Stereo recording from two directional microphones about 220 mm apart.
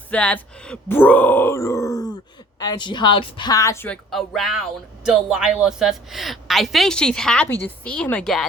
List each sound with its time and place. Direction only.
0.1 s a woman's voice: 5° left (ahead or behind)
4.1 s speech: centre (ahead or behind)